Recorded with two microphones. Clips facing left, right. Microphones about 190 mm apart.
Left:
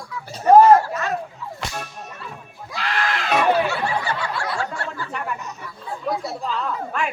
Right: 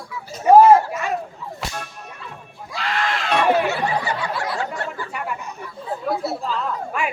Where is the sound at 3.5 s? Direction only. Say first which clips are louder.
Right 1 dB; 20° right (ahead or behind).